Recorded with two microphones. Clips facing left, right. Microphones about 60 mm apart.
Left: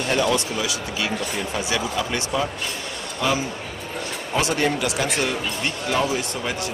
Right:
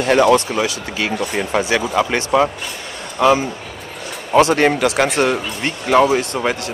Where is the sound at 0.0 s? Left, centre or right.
Right.